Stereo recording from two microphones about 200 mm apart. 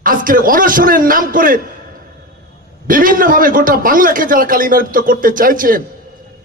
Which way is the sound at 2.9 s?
45° right (ahead or behind).